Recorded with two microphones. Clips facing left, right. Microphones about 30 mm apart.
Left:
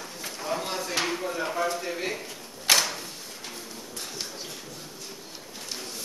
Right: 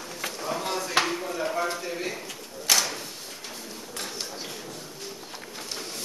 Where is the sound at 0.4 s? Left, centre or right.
Centre.